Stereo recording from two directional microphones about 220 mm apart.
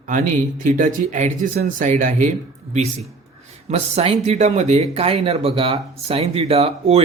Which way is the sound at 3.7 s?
30° right (ahead or behind).